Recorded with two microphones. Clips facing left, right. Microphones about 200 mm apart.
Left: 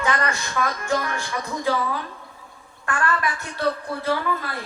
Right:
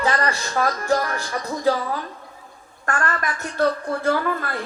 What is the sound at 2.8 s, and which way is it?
A woman's voice, 45° right (ahead or behind).